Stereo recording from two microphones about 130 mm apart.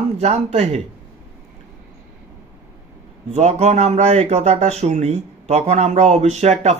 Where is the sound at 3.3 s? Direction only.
60° right (ahead or behind).